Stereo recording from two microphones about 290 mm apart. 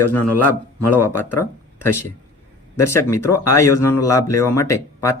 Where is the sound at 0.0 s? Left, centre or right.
Left.